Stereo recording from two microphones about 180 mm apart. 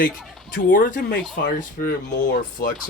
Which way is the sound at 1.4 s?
60° left (ahead or behind).